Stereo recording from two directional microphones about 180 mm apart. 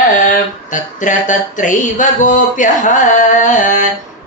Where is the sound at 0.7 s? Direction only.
45° left (ahead or behind).